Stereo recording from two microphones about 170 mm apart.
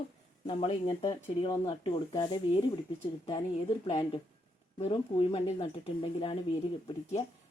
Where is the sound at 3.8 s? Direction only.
30° left (ahead or behind).